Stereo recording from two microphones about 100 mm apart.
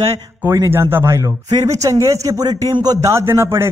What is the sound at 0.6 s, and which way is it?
A man's voice, 25° right (ahead or behind).